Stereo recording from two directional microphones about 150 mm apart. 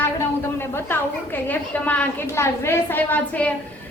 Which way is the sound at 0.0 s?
15° left (ahead or behind).